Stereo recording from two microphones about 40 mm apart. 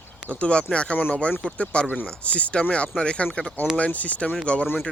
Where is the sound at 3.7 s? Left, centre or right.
Left.